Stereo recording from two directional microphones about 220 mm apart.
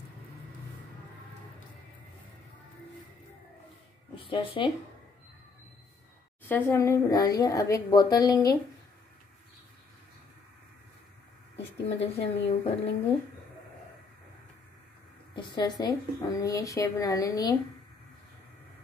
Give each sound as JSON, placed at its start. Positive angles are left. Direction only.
{"t": 4.1, "sound": "a woman's voice", "side_deg": 25}
{"t": 6.5, "sound": "a woman's voice", "side_deg": 10}
{"t": 11.8, "sound": "a woman's voice", "side_deg": 25}
{"t": 15.3, "sound": "a woman's voice", "side_deg": 20}